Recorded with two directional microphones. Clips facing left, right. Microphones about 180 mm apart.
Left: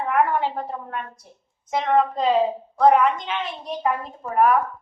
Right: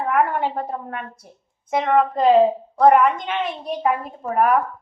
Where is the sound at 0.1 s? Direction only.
50° right (ahead or behind).